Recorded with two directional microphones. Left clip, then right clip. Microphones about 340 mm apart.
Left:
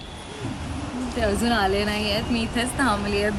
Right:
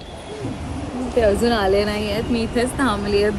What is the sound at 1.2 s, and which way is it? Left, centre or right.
Speech, left.